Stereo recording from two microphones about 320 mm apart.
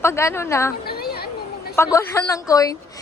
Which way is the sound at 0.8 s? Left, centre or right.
Left.